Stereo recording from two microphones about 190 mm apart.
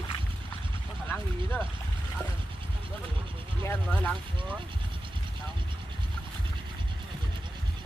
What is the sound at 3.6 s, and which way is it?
Speech, 10° left (ahead or behind).